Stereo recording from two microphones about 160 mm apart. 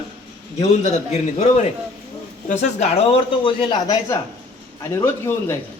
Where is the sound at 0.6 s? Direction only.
45° left (ahead or behind).